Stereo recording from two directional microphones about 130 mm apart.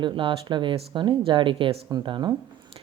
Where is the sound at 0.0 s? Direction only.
40° right (ahead or behind).